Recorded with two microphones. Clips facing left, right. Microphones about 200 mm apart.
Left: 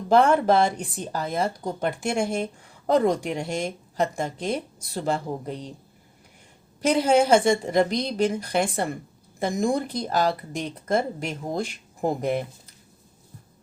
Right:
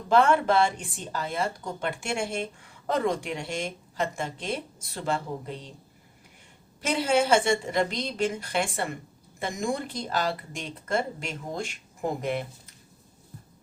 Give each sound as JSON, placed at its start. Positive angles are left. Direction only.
{"t": 0.1, "sound": "speech", "side_deg": 40}
{"t": 6.8, "sound": "speech", "side_deg": 40}